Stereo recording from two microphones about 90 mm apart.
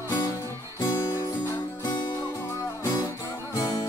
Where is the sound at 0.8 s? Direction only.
35° left (ahead or behind).